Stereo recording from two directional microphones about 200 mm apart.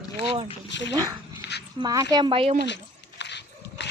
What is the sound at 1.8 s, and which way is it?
Speech, 20° right (ahead or behind).